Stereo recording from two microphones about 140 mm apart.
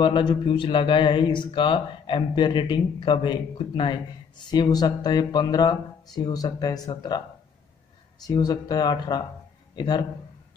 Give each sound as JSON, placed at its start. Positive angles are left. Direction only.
{"t": 0.0, "sound": "speech", "side_deg": 35}
{"t": 8.2, "sound": "speech", "side_deg": 30}